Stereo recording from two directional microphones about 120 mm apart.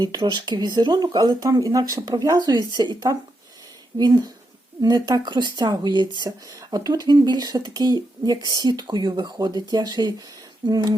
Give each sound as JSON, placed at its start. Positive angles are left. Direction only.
{"t": 0.0, "sound": "speech", "side_deg": -35}